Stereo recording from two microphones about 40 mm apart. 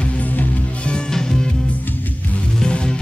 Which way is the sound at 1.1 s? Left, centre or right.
Centre.